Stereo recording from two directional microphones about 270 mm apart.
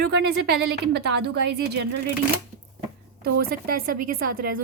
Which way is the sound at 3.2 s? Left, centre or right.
Right.